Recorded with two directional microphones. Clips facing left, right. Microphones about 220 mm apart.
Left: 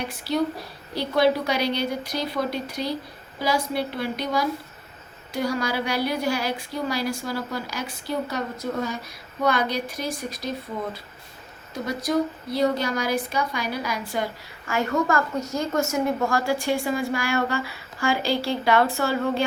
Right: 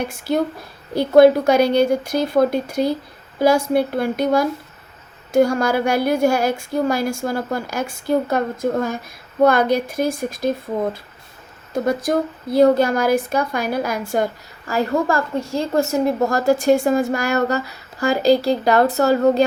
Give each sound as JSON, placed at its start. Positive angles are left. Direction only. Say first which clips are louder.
{"t": 0.0, "sound": "a woman's voice", "louder": "right 4 dB", "side_deg": -50}
{"t": 11.7, "sound": "a woman's voice", "louder": "right 6 dB", "side_deg": -50}
{"t": 14.7, "sound": "a woman's voice", "louder": "right 4 dB", "side_deg": -35}